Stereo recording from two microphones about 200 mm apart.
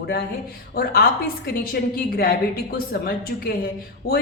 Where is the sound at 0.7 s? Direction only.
50° left (ahead or behind).